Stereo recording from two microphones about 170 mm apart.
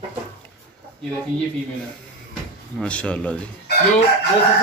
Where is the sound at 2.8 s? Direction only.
5° left (ahead or behind).